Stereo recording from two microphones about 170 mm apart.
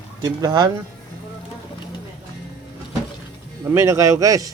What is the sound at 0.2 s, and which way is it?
Speech, 25° right (ahead or behind).